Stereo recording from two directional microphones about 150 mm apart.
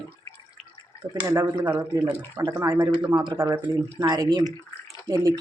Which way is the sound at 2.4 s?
25° right (ahead or behind).